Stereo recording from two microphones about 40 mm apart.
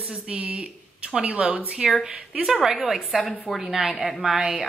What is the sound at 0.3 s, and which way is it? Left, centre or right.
Speech, right.